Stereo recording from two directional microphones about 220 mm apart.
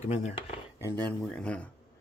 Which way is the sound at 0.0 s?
30° left (ahead or behind).